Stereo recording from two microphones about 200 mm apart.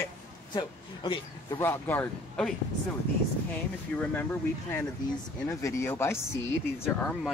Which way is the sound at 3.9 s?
10° left (ahead or behind).